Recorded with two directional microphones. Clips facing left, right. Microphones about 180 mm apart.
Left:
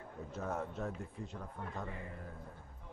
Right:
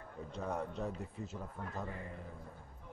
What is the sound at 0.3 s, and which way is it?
A man's voice, 5° left (ahead or behind).